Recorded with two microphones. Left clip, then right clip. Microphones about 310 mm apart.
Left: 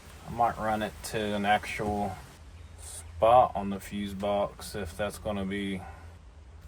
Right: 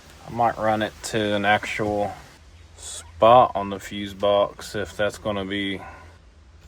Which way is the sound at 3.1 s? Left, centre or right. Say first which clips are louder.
Right 7 dB; right.